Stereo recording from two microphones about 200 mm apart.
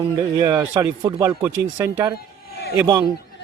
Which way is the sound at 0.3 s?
20° right (ahead or behind).